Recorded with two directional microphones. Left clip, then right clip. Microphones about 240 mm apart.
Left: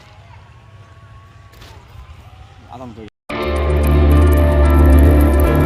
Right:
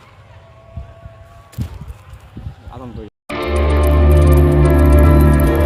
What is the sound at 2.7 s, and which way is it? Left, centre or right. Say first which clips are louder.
Speech: left 1 dB; centre.